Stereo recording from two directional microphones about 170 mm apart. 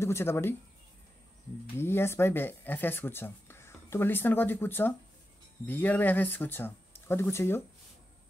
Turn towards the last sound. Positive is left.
turn(degrees=15)  # may be behind; listen again after turning